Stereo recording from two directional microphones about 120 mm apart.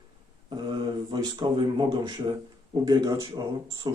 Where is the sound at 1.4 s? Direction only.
40° right (ahead or behind).